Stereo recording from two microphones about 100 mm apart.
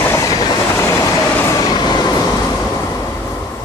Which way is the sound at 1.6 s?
45° left (ahead or behind).